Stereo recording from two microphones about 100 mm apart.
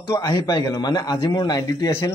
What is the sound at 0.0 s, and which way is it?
A man's voice, 45° left (ahead or behind).